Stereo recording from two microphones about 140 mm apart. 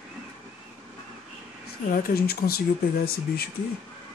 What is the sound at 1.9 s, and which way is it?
Speech, 85° left.